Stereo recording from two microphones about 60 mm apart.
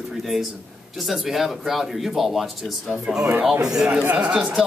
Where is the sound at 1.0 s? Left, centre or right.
Centre.